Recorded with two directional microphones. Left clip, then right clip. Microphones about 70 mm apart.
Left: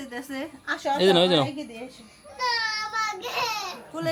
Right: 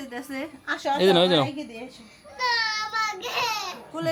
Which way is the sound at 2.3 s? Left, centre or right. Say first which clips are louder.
Right 2 dB; right.